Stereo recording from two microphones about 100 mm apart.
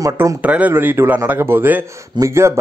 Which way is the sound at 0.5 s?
15° right (ahead or behind).